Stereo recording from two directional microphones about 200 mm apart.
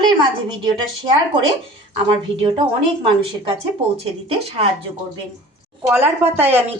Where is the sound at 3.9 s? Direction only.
30° right (ahead or behind).